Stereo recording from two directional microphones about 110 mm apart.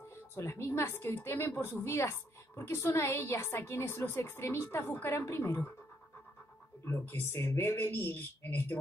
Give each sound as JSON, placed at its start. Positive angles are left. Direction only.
{"t": 0.4, "sound": "a woman's voice", "side_deg": 25}
{"t": 6.8, "sound": "a woman's voice", "side_deg": 20}